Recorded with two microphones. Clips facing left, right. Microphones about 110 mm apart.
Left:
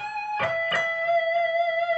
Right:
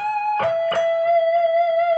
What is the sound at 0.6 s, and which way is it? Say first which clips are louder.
Music: right 9 dB; 35° right (ahead or behind).